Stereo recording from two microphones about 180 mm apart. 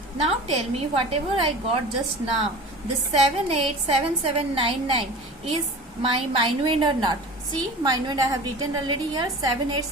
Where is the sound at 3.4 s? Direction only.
35° right (ahead or behind).